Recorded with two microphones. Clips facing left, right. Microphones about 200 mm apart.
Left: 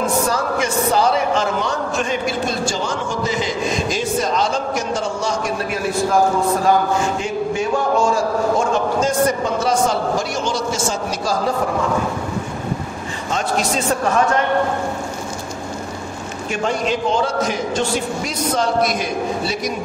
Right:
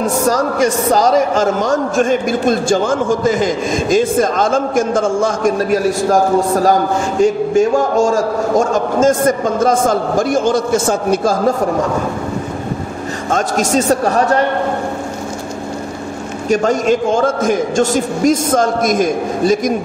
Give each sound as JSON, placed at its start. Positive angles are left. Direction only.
{"t": 0.3, "sound": "a man's voice", "side_deg": -40}
{"t": 7.2, "sound": "a man's voice", "side_deg": -45}
{"t": 13.3, "sound": "a man's voice", "side_deg": -45}
{"t": 16.4, "sound": "a man's voice", "side_deg": -40}